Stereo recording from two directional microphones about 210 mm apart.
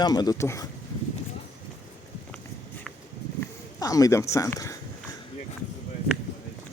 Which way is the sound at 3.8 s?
15° left (ahead or behind).